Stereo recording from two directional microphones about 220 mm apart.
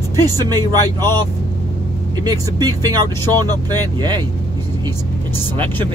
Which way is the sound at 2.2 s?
15° right (ahead or behind).